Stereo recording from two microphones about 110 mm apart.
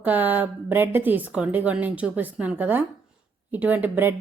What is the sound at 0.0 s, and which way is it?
A woman's voice, 15° right (ahead or behind).